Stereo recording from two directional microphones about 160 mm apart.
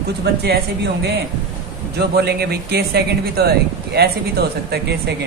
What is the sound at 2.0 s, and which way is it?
Speech, 80° right.